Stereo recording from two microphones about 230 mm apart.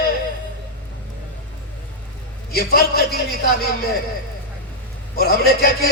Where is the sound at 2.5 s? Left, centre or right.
Left.